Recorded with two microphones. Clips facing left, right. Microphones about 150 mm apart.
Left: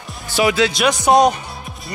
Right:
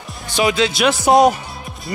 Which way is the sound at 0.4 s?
20° right (ahead or behind).